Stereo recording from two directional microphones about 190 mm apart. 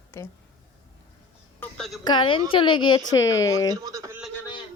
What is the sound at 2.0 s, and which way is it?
A woman's voice, 25° left (ahead or behind).